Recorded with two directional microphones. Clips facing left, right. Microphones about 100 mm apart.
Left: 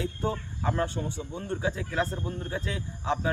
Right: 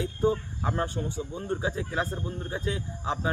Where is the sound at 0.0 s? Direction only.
15° right (ahead or behind).